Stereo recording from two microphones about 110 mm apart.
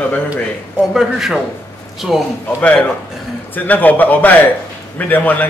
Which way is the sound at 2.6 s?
10° left (ahead or behind).